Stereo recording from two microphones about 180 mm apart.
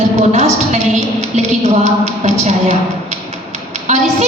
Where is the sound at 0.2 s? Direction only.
40° right (ahead or behind).